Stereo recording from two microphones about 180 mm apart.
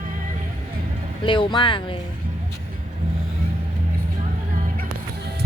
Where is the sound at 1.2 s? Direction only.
25° left (ahead or behind).